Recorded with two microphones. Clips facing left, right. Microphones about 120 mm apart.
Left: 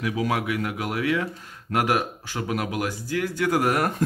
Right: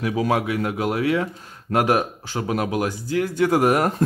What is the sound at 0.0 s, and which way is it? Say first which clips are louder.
Speech: right 4 dB; 35° right (ahead or behind).